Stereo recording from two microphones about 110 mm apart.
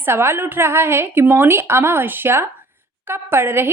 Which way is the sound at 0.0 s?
20° right (ahead or behind).